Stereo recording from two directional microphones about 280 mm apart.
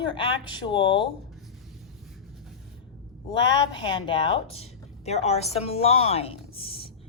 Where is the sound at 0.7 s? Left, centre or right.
Centre.